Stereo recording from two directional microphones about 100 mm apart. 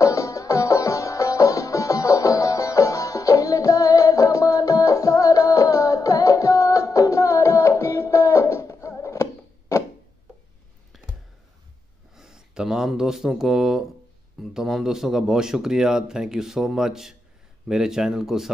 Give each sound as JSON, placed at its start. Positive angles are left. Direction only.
{"t": 0.0, "sound": "music", "side_deg": 30}
{"t": 12.2, "sound": "a sound", "side_deg": -5}
{"t": 14.4, "sound": "a man's voice", "side_deg": -5}